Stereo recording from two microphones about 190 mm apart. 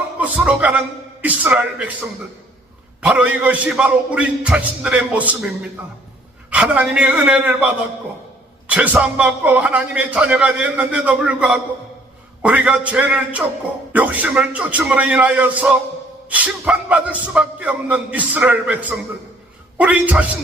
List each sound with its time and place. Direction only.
0.2 s a man's voice: 5° right (ahead or behind)
3.0 s a man's voice: 5° right (ahead or behind)
6.5 s a man's voice: 5° right (ahead or behind)